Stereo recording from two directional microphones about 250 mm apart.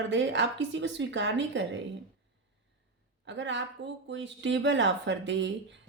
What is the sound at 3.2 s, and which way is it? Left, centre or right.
A woman's voice, right.